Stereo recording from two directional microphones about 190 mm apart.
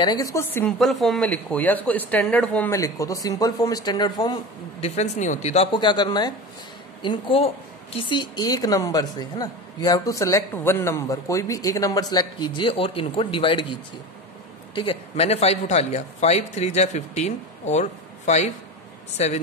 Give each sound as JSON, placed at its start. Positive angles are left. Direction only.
{"t": 0.0, "sound": "speech", "side_deg": 20}
{"t": 0.7, "sound": "speech", "side_deg": 0}
{"t": 4.8, "sound": "a man's voice", "side_deg": 35}